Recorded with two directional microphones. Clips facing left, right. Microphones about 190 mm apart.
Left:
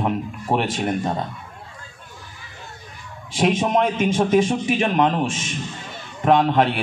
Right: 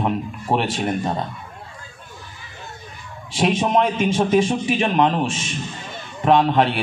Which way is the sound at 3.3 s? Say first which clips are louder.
Even; 50° left (ahead or behind).